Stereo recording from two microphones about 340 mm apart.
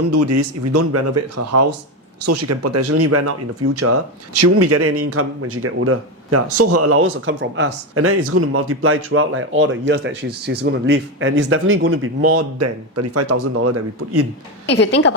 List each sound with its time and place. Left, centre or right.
0.1 s speech: right
14.7 s a woman's voice: left